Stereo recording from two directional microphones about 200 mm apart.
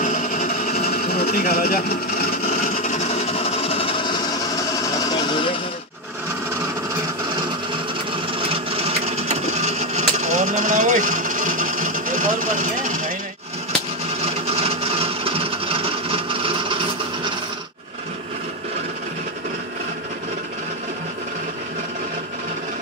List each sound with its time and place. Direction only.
0.0 s sewing machine: 40° left (ahead or behind)
4.9 s music: 20° left (ahead or behind)
8.4 s printer: 30° right (ahead or behind)
14.2 s wood: 30° right (ahead or behind)